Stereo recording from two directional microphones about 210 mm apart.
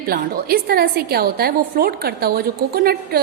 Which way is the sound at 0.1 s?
45° right (ahead or behind).